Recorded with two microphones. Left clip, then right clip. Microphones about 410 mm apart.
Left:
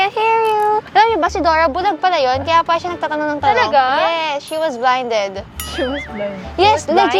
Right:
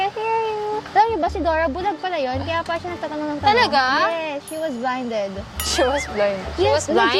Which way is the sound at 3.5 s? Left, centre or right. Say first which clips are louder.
Left 3 dB; right.